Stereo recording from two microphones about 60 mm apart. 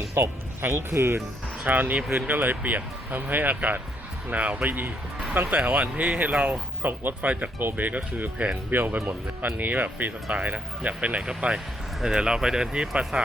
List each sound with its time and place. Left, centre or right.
0.1 s speech: right
1.6 s speech: right
2.0 s speech: centre
2.3 s speech: right; by 13.2 s centre